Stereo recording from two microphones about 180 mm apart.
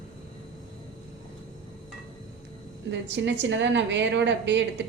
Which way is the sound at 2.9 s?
75° right (ahead or behind).